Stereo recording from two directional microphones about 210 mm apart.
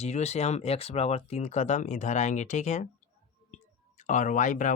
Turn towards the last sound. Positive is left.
turn(degrees=35)  # may be behind; listen again after turning